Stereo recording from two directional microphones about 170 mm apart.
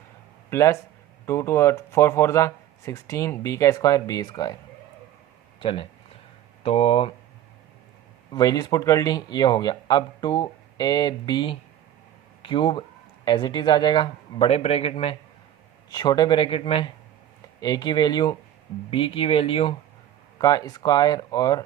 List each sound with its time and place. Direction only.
0.5 s speech: 15° left (ahead or behind)
5.5 s speech: 30° left (ahead or behind)
8.3 s speech: 20° left (ahead or behind)
15.9 s speech: 25° left (ahead or behind)
17.6 s speech: 25° left (ahead or behind)